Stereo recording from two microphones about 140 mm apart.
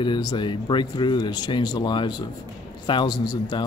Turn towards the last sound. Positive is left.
turn(degrees=30)  # may be behind; listen again after turning